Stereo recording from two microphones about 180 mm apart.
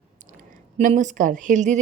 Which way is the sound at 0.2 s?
45° right (ahead or behind).